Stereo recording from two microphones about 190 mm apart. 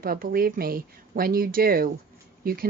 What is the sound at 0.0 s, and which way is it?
A woman's voice, 50° right (ahead or behind).